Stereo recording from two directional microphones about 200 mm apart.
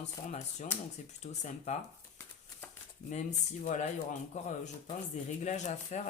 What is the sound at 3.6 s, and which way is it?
Speech, 40° left (ahead or behind).